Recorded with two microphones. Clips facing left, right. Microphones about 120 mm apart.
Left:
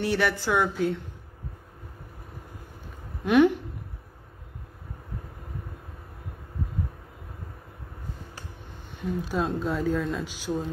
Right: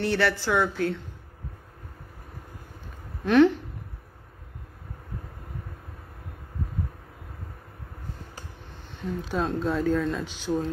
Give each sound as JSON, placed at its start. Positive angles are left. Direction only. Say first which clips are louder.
{"t": 0.0, "sound": "a woman's voice", "louder": "right 1 dB", "side_deg": 15}
{"t": 3.3, "sound": "a woman's voice", "louder": "right 1 dB", "side_deg": 15}
{"t": 9.0, "sound": "speech", "louder": "left 1 dB", "side_deg": 5}